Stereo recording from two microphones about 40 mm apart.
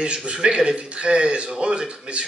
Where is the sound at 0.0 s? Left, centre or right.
Right.